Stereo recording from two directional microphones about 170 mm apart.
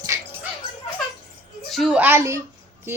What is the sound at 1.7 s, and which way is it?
Speech, centre (ahead or behind).